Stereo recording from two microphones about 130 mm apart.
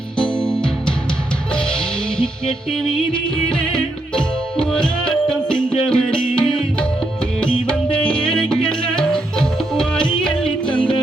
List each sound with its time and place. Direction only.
0.2 s music: 5° left (ahead or behind)
3.5 s tabla: 5° left (ahead or behind)
7.3 s music: 10° left (ahead or behind)